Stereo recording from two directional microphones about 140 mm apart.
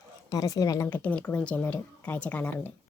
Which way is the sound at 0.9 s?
10° left (ahead or behind).